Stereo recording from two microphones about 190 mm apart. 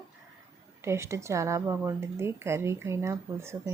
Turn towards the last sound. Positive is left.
turn(degrees=-15)  # may be behind; listen again after turning